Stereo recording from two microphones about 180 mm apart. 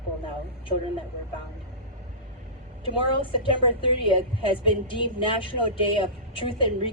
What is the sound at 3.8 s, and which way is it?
A woman's voice, 30° left (ahead or behind).